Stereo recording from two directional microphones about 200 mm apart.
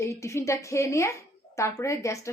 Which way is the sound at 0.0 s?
15° left (ahead or behind).